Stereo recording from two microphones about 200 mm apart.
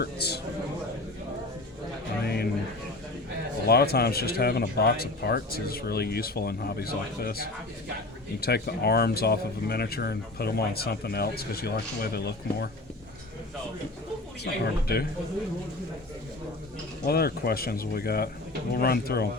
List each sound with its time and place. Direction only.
0.0 s speech: 55° left (ahead or behind)
2.2 s a sound: 50° left (ahead or behind)
3.7 s speech: 50° left (ahead or behind)
14.4 s speech: 50° left (ahead or behind)
17.1 s speech: 50° left (ahead or behind)